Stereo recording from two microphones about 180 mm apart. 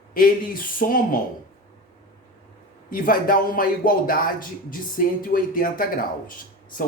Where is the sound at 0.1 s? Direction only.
50° left (ahead or behind).